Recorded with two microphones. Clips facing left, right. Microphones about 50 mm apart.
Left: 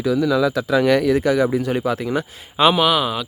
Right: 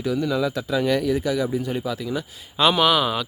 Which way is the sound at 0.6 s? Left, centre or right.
Left.